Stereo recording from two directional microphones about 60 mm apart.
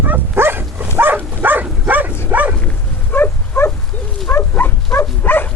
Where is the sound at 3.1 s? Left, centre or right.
Left.